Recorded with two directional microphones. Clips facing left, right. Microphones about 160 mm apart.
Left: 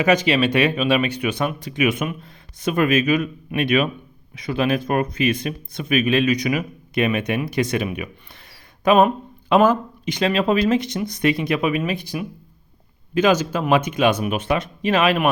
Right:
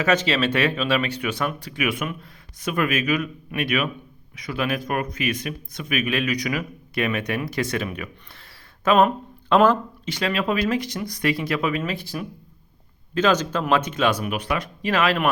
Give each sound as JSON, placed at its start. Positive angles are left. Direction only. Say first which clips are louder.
{"t": 0.0, "sound": "speech", "louder": "left 3 dB", "side_deg": 15}
{"t": 9.0, "sound": "speech", "louder": "left 2 dB", "side_deg": 5}
{"t": 10.1, "sound": "speech", "louder": "left 5 dB", "side_deg": 20}